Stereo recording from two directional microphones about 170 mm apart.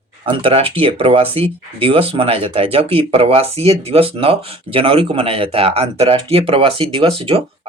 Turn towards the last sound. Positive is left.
turn(degrees=-30)  # may be behind; listen again after turning